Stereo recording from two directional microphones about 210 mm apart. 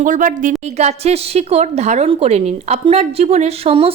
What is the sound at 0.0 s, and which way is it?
A woman's voice, 40° right (ahead or behind).